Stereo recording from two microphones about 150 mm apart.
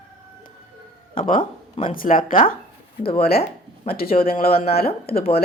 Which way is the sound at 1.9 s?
70° left (ahead or behind).